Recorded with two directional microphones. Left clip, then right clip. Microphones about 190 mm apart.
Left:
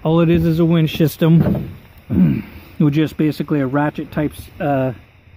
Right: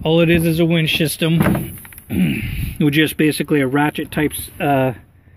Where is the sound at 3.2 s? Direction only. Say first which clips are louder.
Right 2 dB; 5° left (ahead or behind).